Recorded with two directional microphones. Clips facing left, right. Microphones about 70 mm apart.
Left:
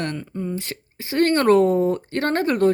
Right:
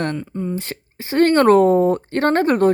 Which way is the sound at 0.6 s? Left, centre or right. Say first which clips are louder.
Right 3 dB; right.